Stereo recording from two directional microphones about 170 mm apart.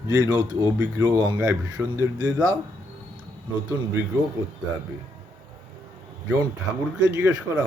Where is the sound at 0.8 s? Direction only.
15° right (ahead or behind).